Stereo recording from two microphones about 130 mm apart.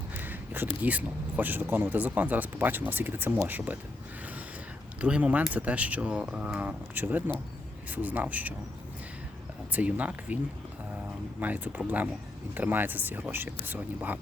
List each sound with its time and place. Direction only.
0.2 s a sound: 15° right (ahead or behind)
0.8 s speech: 10° right (ahead or behind)
4.9 s speech: 10° right (ahead or behind)
9.7 s speech: 10° right (ahead or behind)
11.3 s speech: 15° right (ahead or behind)